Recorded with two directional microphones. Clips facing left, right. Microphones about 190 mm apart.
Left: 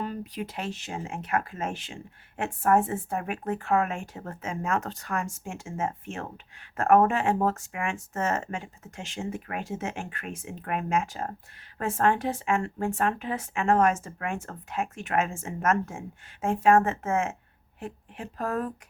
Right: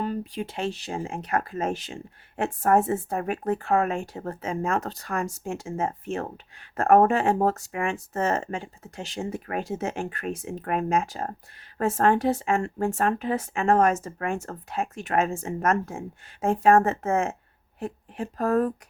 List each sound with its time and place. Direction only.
0.0 s speech: 30° right (ahead or behind)